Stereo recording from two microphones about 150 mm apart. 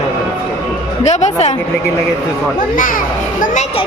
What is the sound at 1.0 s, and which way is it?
Speech, 50° left (ahead or behind).